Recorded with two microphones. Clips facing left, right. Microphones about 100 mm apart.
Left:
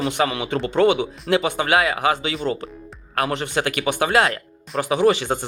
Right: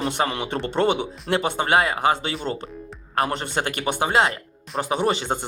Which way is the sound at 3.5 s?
25° right (ahead or behind).